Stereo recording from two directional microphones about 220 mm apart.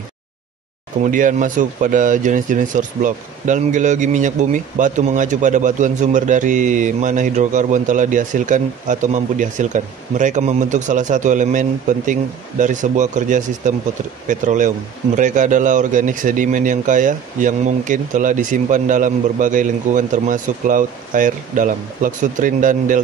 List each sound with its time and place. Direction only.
1.0 s speech: 35° right (ahead or behind)